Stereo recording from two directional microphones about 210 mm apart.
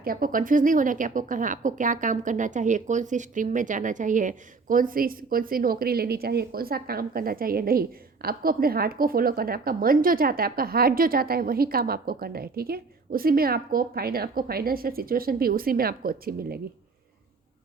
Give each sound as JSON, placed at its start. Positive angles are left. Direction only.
{"t": 0.0, "sound": "speech", "side_deg": -40}